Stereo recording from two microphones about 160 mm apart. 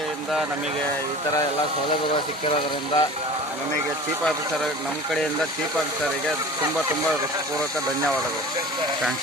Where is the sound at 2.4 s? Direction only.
35° left (ahead or behind).